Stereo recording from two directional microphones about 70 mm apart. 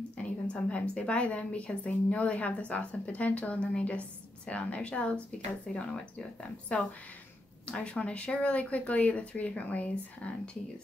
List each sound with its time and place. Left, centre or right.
0.2 s a woman's voice: centre